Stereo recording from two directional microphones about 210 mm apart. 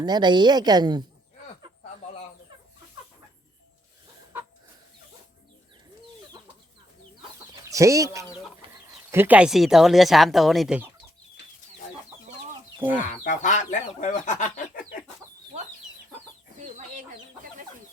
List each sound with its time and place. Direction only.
0.0 s a woman's voice: 20° right (ahead or behind)
7.5 s speech: 15° right (ahead or behind)
12.8 s speech: 10° right (ahead or behind)
13.1 s speech: 35° left (ahead or behind)
16.6 s chicken: 35° right (ahead or behind)